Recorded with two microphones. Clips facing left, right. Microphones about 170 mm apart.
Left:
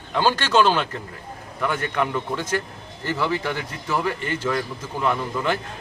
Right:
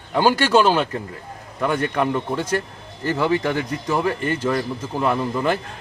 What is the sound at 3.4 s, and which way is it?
Speech, 45° right (ahead or behind).